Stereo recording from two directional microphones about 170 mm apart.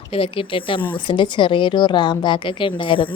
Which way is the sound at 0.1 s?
35° left (ahead or behind).